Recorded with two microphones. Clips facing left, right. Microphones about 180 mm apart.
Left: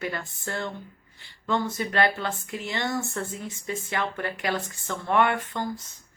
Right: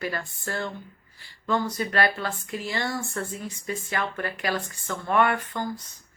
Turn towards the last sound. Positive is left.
turn(degrees=25)  # may be behind; listen again after turning